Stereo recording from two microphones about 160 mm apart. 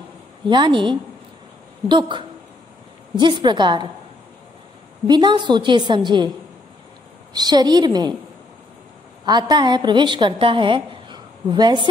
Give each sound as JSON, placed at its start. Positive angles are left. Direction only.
{"t": 0.5, "sound": "a woman's voice", "side_deg": -30}
{"t": 5.0, "sound": "a woman's voice", "side_deg": -30}
{"t": 7.3, "sound": "a woman's voice", "side_deg": -25}
{"t": 9.2, "sound": "a woman's voice", "side_deg": -25}